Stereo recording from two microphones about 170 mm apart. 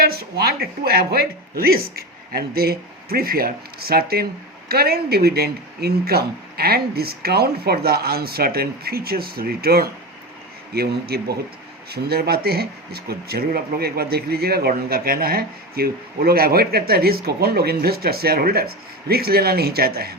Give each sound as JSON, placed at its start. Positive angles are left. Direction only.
{"t": 0.0, "sound": "speech", "side_deg": -65}